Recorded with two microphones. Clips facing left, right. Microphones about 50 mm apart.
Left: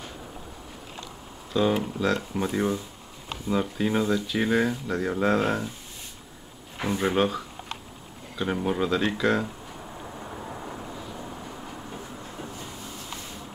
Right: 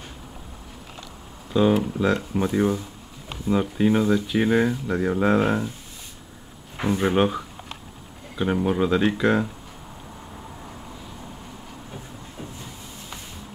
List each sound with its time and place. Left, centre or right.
1.5 s speech: centre
2.1 s speech: centre
6.8 s speech: centre